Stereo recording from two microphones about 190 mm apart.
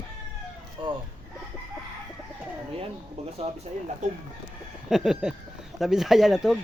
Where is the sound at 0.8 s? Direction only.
25° right (ahead or behind).